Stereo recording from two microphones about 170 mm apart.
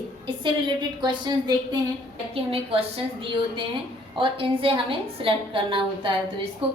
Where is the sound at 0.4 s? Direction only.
25° right (ahead or behind).